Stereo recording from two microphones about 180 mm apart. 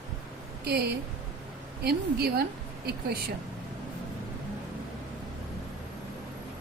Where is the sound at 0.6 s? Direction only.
65° right (ahead or behind).